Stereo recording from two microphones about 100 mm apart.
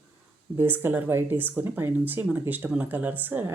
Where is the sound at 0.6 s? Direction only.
20° right (ahead or behind).